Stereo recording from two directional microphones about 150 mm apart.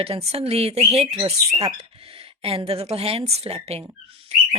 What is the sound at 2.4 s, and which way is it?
Speech, 40° right (ahead or behind).